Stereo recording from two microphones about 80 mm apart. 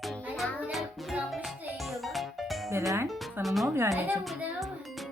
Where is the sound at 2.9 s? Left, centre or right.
Right.